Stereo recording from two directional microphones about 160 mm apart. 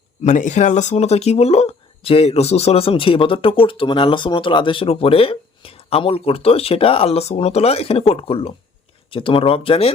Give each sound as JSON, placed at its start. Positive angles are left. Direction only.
{"t": 0.2, "sound": "speech", "side_deg": 50}